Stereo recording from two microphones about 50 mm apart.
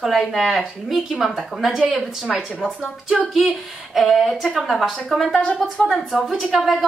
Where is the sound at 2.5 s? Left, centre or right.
Centre.